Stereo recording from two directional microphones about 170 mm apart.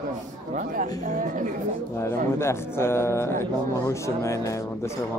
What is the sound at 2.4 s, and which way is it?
Speech, 15° left (ahead or behind).